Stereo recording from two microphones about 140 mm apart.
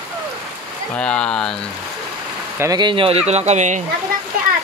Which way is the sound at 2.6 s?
30° right (ahead or behind).